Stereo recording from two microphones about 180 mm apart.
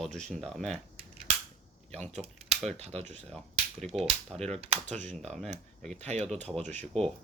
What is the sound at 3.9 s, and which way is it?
Speech, 35° right (ahead or behind).